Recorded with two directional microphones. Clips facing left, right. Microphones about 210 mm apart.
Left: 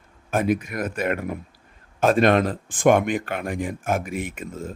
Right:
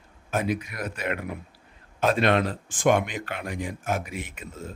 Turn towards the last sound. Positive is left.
turn(degrees=50)  # may be behind; listen again after turning